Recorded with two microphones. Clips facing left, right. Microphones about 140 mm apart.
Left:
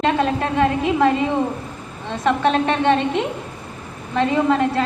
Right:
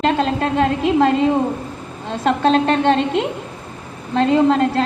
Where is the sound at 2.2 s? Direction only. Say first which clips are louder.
Right 2 dB; 30° right (ahead or behind).